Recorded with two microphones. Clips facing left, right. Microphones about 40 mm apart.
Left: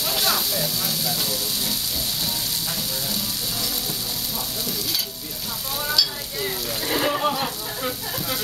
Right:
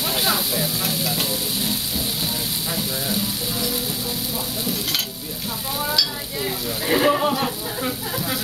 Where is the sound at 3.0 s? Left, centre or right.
Centre.